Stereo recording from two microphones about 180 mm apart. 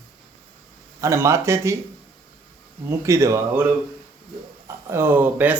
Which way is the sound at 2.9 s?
15° right (ahead or behind).